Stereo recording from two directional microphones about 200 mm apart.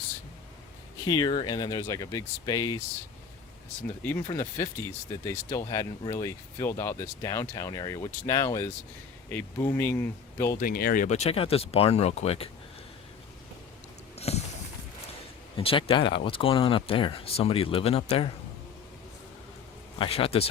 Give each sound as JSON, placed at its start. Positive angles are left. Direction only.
{"t": 1.0, "sound": "speech", "side_deg": 20}
{"t": 4.0, "sound": "speech", "side_deg": 10}
{"t": 10.6, "sound": "speech", "side_deg": 45}
{"t": 14.2, "sound": "a sound", "side_deg": 30}
{"t": 15.5, "sound": "speech", "side_deg": 25}
{"t": 20.0, "sound": "speech", "side_deg": 30}